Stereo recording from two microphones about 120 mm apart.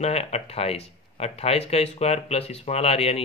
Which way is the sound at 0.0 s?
60° left (ahead or behind).